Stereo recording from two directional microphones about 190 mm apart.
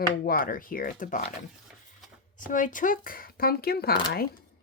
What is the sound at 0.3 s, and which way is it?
Speech, 50° left (ahead or behind).